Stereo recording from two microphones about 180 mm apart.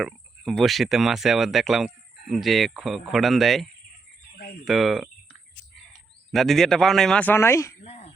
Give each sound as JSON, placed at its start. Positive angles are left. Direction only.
{"t": 0.0, "sound": "speech", "side_deg": 0}
{"t": 4.6, "sound": "cricket", "side_deg": 0}
{"t": 6.3, "sound": "speech", "side_deg": 0}
{"t": 7.9, "sound": "a sound", "side_deg": 40}